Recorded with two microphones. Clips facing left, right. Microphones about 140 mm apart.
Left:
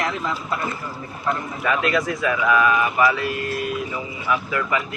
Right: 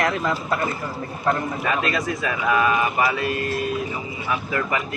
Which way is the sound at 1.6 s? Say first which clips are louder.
Left 2 dB; 30° right (ahead or behind).